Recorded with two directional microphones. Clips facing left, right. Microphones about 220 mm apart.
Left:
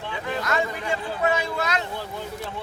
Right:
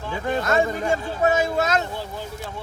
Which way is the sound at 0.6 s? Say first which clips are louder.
Right 5 dB; 45° right (ahead or behind).